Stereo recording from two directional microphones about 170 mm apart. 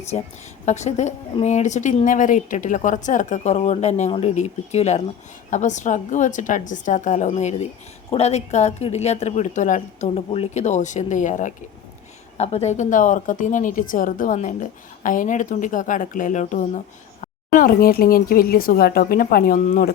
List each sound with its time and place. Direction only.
0.6 s a woman's voice: 45° left (ahead or behind)